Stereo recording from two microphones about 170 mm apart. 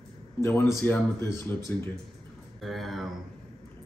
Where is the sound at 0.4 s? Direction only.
15° left (ahead or behind).